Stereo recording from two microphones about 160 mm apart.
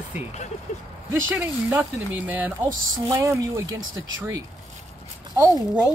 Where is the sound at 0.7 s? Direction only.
45° left (ahead or behind).